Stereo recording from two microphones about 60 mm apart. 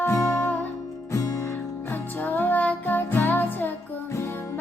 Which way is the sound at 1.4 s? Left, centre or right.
Left.